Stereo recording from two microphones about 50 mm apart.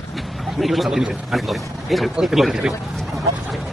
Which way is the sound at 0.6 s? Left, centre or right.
Centre.